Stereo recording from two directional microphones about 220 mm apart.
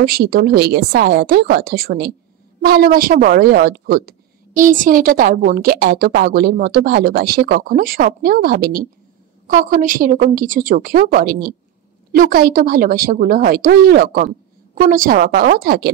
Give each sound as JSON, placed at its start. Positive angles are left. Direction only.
{"t": 0.0, "sound": "a woman's voice", "side_deg": -45}